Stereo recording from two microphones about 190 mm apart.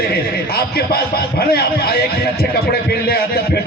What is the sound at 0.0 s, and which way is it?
A man's voice, 55° left (ahead or behind).